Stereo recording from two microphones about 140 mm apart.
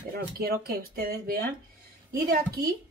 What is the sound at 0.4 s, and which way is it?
Speech, 90° right.